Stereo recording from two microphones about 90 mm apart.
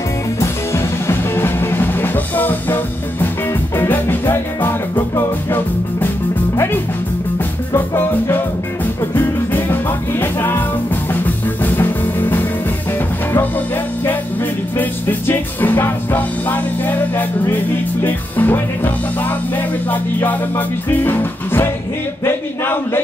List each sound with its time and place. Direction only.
1.0 s music: 25° left (ahead or behind)
11.6 s music: 20° left (ahead or behind)
14.8 s music: 20° left (ahead or behind)
19.9 s music: 20° left (ahead or behind)